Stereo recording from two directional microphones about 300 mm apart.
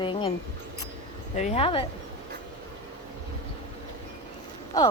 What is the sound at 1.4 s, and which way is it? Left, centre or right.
Speech, left.